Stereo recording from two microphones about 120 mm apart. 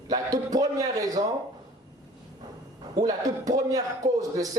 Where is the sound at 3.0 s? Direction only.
30° right (ahead or behind).